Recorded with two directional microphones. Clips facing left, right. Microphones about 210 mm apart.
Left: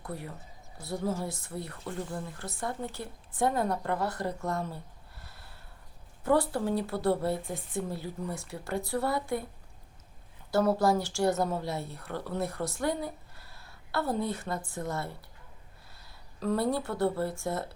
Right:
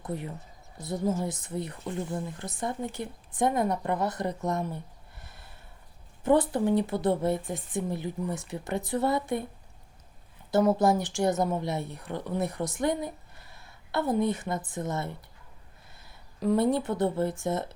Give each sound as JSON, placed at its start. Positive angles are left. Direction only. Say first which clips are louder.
{"t": 0.0, "sound": "speech", "louder": "right 4 dB", "side_deg": -20}
{"t": 10.5, "sound": "speech", "louder": "right 2 dB", "side_deg": -20}
{"t": 16.4, "sound": "speech", "louder": "right 4 dB", "side_deg": -15}